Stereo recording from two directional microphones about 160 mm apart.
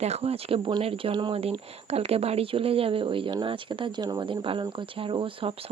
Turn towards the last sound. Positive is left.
turn(degrees=-35)  # may be behind; listen again after turning